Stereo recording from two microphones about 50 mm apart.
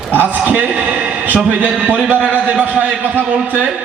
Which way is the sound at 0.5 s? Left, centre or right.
Right.